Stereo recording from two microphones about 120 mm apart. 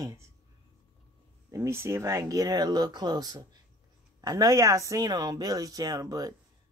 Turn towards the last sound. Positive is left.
turn(degrees=-30)  # may be behind; listen again after turning